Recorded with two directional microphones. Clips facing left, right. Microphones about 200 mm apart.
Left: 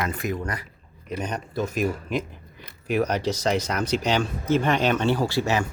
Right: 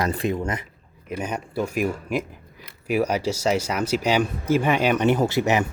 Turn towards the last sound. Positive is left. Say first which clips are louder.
# right 3 dB
turn(degrees=-20)  # may be behind; listen again after turning